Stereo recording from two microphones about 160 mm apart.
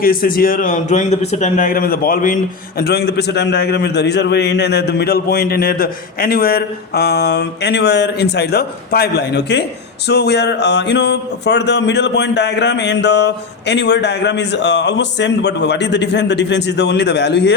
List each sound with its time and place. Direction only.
0.0 s speech: 65° left (ahead or behind); by 17.5 s 90° left